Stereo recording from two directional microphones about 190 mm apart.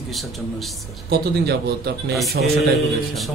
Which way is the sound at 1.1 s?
55° right (ahead or behind).